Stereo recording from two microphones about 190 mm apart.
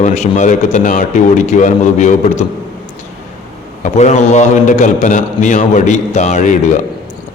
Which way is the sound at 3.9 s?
35° left (ahead or behind).